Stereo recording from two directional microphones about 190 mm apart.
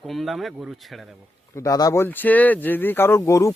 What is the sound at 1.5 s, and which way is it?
Speech, 15° left (ahead or behind).